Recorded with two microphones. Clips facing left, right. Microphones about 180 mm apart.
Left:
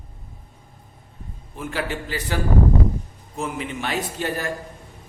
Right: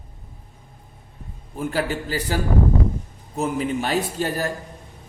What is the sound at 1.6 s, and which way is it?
Speech, 40° right (ahead or behind).